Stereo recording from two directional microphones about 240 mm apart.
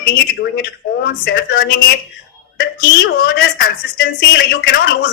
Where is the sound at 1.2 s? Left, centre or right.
Left.